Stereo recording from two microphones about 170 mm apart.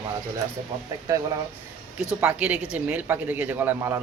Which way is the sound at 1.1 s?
20° right (ahead or behind).